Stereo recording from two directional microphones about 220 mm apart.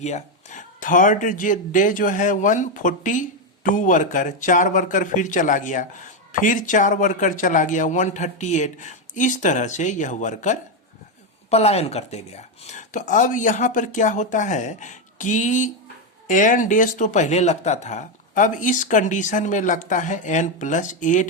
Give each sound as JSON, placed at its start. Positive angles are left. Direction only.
{"t": 0.0, "sound": "speech", "side_deg": 30}